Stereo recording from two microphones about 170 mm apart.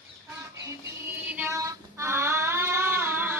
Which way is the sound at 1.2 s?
10° right (ahead or behind).